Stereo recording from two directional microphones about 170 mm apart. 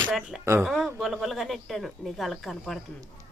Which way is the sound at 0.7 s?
Centre (ahead or behind).